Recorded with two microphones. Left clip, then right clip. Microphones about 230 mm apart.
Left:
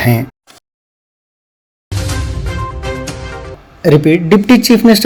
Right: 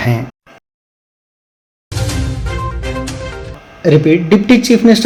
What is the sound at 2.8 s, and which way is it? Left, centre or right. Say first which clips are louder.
Music: left 2 dB; centre.